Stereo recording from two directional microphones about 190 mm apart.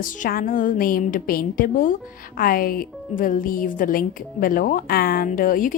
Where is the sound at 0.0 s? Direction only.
50° left (ahead or behind).